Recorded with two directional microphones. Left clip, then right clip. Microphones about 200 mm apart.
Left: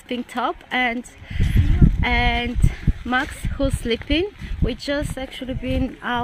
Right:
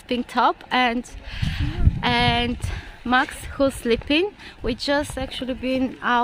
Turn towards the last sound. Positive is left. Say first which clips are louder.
# right 3 dB
turn(degrees=-5)  # may be behind; listen again after turning